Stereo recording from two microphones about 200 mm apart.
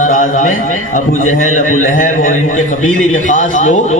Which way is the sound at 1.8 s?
40° left (ahead or behind).